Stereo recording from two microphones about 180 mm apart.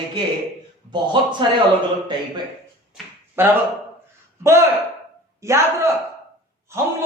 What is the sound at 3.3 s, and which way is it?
Speech, 10° right (ahead or behind).